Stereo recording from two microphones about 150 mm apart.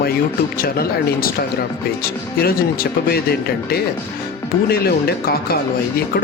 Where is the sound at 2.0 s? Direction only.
90° left.